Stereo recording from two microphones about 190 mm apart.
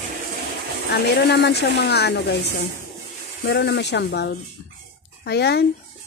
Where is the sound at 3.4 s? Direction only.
60° left (ahead or behind).